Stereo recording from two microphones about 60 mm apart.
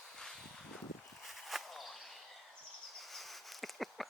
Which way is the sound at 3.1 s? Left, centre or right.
Centre.